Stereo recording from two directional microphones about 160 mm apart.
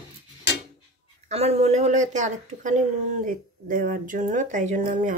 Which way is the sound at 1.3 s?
40° right (ahead or behind).